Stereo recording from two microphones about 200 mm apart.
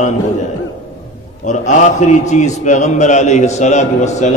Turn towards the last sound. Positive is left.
turn(degrees=35)  # may be behind; listen again after turning